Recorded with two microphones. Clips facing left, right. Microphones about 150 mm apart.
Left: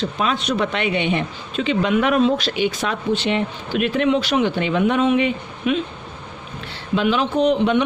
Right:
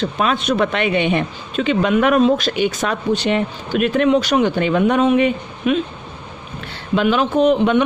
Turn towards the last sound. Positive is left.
turn(degrees=-50)  # may be behind; listen again after turning